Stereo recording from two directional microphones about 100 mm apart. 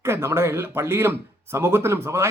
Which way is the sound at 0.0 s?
25° right (ahead or behind).